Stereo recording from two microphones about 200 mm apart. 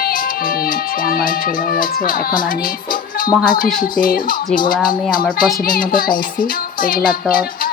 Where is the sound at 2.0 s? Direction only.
45° left (ahead or behind).